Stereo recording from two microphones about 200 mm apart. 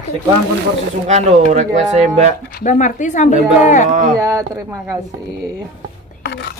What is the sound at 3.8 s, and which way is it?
Speech, 40° right (ahead or behind).